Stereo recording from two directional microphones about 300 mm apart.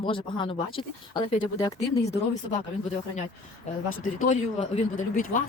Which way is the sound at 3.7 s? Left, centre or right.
Left.